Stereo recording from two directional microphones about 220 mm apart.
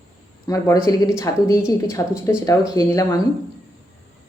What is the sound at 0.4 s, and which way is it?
Speech, 15° left (ahead or behind).